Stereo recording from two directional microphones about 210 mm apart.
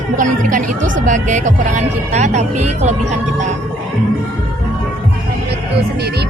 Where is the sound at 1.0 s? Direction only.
35° right (ahead or behind).